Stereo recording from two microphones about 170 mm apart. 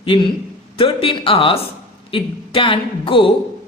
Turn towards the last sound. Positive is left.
turn(degrees=30)  # may be behind; listen again after turning